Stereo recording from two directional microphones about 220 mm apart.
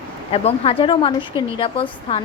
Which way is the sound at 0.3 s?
25° left (ahead or behind).